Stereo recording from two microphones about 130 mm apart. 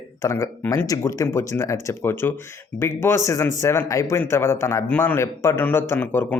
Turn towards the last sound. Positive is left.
turn(degrees=15)  # may be behind; listen again after turning